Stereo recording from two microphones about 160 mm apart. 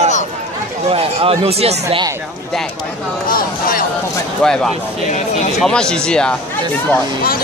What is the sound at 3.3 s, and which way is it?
Speech, 60° left (ahead or behind).